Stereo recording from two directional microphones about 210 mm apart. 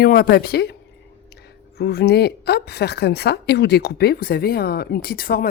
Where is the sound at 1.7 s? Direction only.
50° left (ahead or behind).